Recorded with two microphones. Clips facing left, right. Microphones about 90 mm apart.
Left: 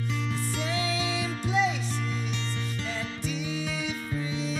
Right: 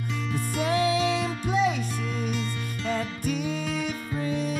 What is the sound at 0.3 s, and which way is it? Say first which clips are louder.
Music: right 9 dB; 50° right (ahead or behind).